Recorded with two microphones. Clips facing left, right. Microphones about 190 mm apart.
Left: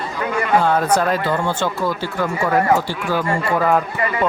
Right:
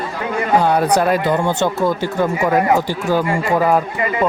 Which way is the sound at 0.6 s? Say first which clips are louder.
Right 2 dB; 15° right (ahead or behind).